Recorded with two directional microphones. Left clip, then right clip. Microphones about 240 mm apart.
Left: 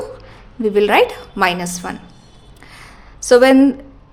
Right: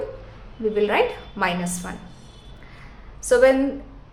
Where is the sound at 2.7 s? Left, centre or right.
Left.